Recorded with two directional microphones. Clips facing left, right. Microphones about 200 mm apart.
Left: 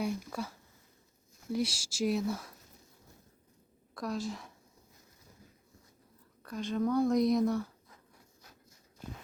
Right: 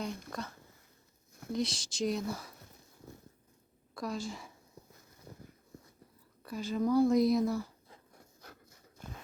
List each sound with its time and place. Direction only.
0.0 s speech: 10° left (ahead or behind)
1.5 s speech: 10° left (ahead or behind)
3.9 s a woman's voice: centre (ahead or behind)
6.4 s speech: 5° right (ahead or behind)
8.4 s a sound: 65° right (ahead or behind)